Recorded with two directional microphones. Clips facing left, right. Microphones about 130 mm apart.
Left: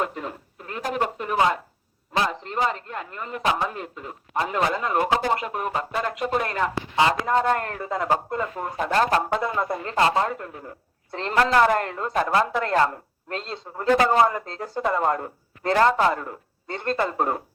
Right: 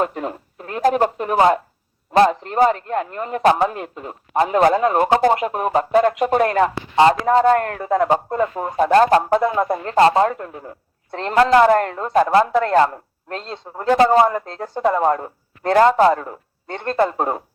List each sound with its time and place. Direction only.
0.0 s a man's voice: 35° right (ahead or behind)
6.9 s speech: 30° right (ahead or behind)
7.6 s a man's voice: 50° right (ahead or behind)
8.0 s speech: 35° right (ahead or behind)
8.9 s speech: 40° right (ahead or behind)
14.8 s speech: 20° right (ahead or behind)
16.8 s a man's voice: 45° right (ahead or behind)
17.2 s speech: 25° right (ahead or behind)